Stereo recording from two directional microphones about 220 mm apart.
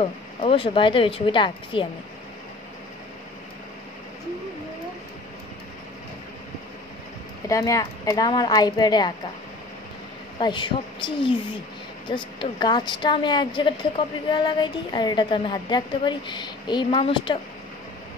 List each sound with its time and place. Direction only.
0.0 s a woman's voice: 25° left (ahead or behind)
7.4 s speech: 15° left (ahead or behind)
10.4 s a woman's voice: 20° left (ahead or behind)